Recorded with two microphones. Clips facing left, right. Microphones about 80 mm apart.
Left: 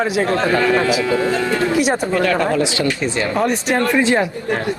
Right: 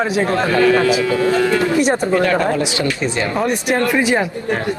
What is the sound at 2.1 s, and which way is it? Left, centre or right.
Speech, right.